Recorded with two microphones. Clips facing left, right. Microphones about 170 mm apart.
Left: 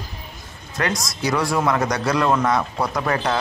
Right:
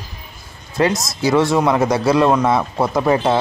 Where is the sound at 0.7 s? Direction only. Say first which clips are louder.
Right 7 dB; 25° right (ahead or behind).